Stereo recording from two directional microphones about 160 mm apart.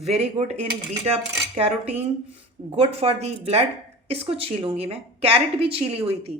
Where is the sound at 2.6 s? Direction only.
40° right (ahead or behind).